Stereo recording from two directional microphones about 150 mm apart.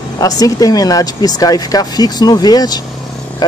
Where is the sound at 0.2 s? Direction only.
25° left (ahead or behind).